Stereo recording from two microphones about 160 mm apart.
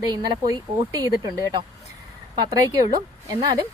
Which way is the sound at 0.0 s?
25° right (ahead or behind).